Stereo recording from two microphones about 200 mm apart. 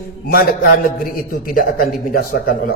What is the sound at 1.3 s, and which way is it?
A man's voice, 45° left (ahead or behind).